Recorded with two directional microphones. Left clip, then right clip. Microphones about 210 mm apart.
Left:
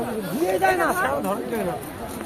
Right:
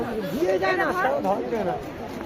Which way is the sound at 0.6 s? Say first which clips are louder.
Left 3 dB; 30° left (ahead or behind).